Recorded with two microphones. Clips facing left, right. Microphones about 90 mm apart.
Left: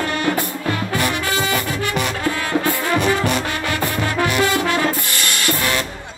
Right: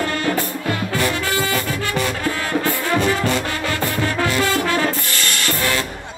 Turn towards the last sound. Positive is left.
turn(degrees=15)  # may be behind; listen again after turning